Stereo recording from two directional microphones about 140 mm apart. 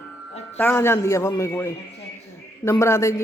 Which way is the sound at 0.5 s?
15° left (ahead or behind).